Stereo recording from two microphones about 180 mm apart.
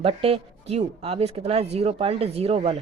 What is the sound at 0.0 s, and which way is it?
A woman's voice, 30° right (ahead or behind).